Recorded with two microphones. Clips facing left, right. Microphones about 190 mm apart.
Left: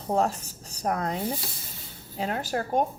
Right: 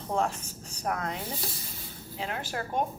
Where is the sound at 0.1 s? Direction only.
40° left (ahead or behind).